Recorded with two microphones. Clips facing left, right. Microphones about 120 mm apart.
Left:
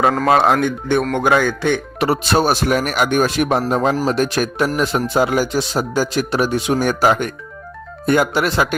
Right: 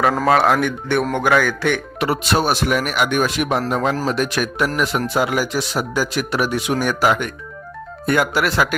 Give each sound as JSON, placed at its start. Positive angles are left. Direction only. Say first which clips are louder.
{"t": 0.3, "sound": "speech", "louder": "left 1 dB", "side_deg": 20}
{"t": 2.0, "sound": "speech", "louder": "left 4 dB", "side_deg": 30}